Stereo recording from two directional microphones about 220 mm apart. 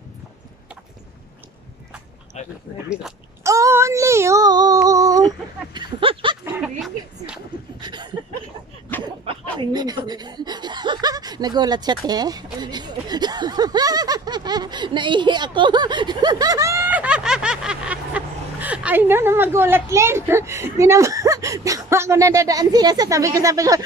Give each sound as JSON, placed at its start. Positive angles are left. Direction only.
{"t": 2.4, "sound": "speech", "side_deg": 30}
{"t": 3.4, "sound": "child singing", "side_deg": -15}
{"t": 5.8, "sound": "speech", "side_deg": -25}
{"t": 6.4, "sound": "a sound", "side_deg": -5}
{"t": 7.8, "sound": "a sound", "side_deg": -20}
{"t": 9.2, "sound": "speech", "side_deg": -25}